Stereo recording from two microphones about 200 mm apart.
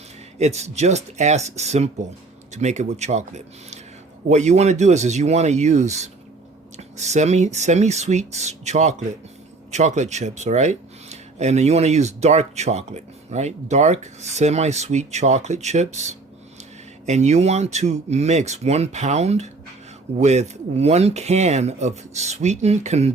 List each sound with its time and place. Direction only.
0.3 s speech: 35° right (ahead or behind)